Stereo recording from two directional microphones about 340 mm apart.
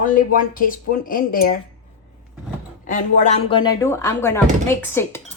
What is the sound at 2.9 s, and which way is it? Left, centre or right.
Speech, left.